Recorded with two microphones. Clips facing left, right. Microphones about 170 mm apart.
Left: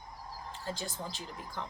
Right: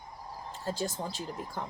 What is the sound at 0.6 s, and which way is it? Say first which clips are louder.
Speech: right 6 dB; 45° right (ahead or behind).